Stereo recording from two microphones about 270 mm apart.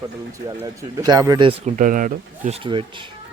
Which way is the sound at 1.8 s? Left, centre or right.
Right.